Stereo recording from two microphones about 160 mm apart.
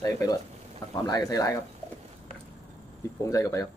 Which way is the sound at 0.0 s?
20° left (ahead or behind).